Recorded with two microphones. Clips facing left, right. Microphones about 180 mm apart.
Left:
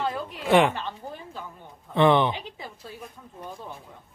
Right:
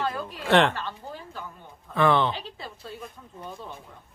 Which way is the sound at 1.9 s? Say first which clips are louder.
Left 2 dB; 20° left (ahead or behind).